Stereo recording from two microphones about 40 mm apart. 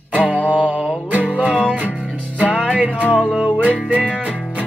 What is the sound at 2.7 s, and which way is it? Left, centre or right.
Music, right.